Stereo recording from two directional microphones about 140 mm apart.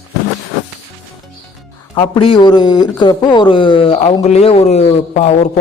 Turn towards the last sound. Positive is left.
turn(degrees=55)  # may be behind; listen again after turning